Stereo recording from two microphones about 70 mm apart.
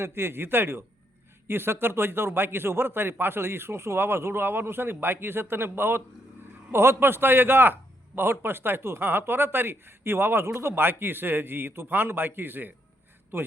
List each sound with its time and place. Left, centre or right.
0.0 s a man's voice: right